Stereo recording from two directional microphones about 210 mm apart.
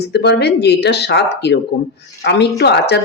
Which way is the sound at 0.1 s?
50° left (ahead or behind).